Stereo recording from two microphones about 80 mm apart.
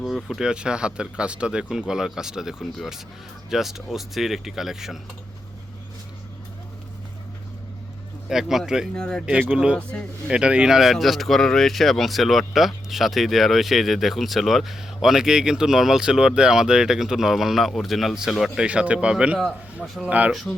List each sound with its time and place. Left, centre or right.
0.0 s speech: centre
8.3 s speech: centre
9.0 s speech: centre
10.2 s speech: centre
18.6 s speech: centre